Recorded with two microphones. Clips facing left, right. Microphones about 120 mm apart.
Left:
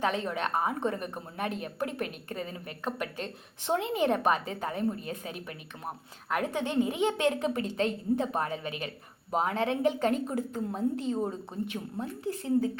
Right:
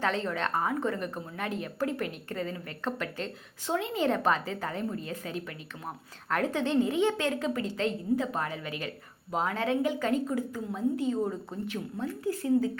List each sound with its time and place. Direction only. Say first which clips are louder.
0.0 s a woman's voice: even; 15° left (ahead or behind)